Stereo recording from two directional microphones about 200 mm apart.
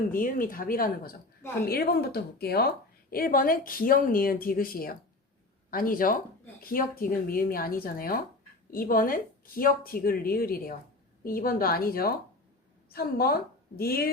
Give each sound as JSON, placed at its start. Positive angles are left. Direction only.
{"t": 0.1, "sound": "a woman's voice", "side_deg": 45}